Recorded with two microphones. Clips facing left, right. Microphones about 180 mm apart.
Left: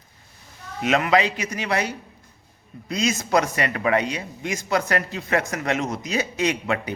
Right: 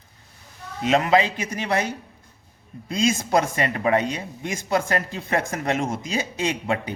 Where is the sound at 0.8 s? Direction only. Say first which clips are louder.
Right 1 dB; 30° right (ahead or behind).